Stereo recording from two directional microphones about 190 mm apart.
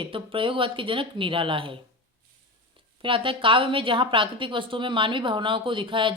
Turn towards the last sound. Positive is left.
turn(degrees=-25)  # may be behind; listen again after turning